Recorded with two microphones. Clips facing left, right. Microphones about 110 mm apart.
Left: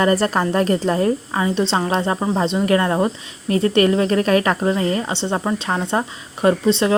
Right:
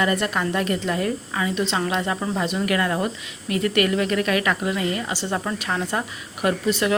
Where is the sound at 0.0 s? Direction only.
35° left (ahead or behind).